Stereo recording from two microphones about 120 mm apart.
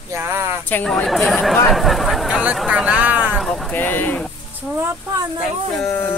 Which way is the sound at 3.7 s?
15° left (ahead or behind).